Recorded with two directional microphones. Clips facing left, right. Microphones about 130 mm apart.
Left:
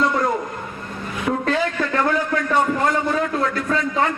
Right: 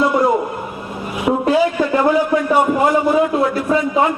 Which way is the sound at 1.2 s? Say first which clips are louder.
Right 6 dB; 15° right (ahead or behind).